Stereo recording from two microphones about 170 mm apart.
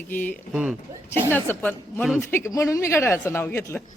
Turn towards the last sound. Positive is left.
turn(degrees=15)  # may be behind; listen again after turning